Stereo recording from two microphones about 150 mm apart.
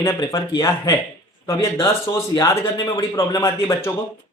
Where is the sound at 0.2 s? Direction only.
25° left (ahead or behind).